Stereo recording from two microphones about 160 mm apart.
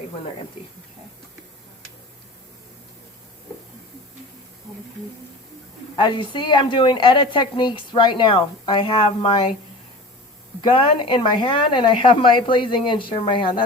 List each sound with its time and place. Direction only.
6.0 s a woman's voice: 30° left (ahead or behind)
10.6 s a woman's voice: 30° left (ahead or behind)